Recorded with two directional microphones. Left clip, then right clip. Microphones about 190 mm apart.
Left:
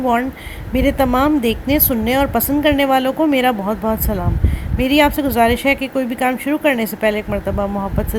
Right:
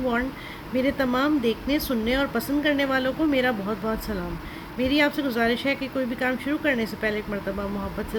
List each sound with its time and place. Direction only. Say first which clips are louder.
0.7 s speech: left 8 dB; 25° left (ahead or behind)